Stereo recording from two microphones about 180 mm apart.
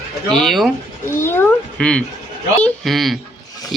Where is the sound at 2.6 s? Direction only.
Centre (ahead or behind).